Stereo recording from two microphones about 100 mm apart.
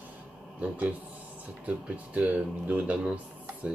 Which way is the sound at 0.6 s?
15° right (ahead or behind).